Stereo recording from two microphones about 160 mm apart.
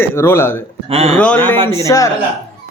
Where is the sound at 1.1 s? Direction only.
5° left (ahead or behind).